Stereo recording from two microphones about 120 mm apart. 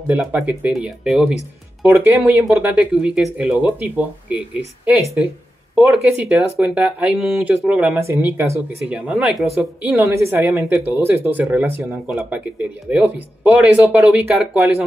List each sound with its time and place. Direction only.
0.0 s speech: 10° right (ahead or behind)
5.8 s speech: 10° right (ahead or behind)
10.0 s speech: 20° right (ahead or behind); by 14.7 s 5° right (ahead or behind)